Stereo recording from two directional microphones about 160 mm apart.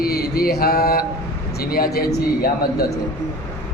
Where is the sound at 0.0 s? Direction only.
75° left (ahead or behind).